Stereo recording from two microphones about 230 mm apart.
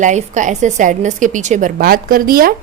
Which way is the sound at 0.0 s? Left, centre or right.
Right.